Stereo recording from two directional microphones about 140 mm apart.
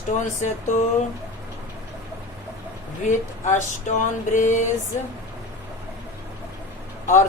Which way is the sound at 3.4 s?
60° left (ahead or behind).